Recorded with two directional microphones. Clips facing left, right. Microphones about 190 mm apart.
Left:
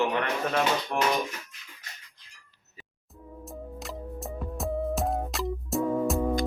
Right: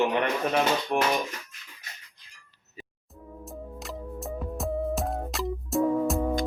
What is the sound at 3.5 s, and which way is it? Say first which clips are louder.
Music: even; centre (ahead or behind).